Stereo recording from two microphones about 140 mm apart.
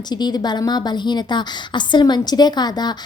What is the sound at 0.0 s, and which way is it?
A woman's voice, 30° left (ahead or behind).